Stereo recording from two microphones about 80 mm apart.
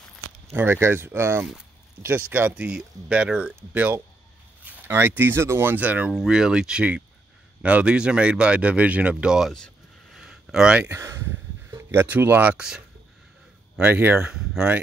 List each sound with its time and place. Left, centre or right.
0.5 s speech: right
6.1 s speech: centre
10.1 s a sound: centre
10.9 s speech: right
13.8 s speech: right
14.1 s speech: centre